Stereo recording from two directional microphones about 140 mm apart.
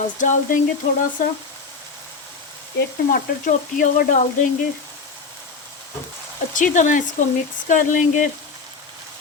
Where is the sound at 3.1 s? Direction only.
70° left (ahead or behind).